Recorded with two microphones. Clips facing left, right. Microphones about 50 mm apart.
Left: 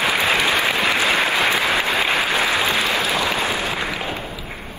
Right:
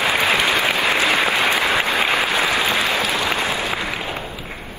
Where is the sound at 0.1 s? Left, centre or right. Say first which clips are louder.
Right 1 dB; right.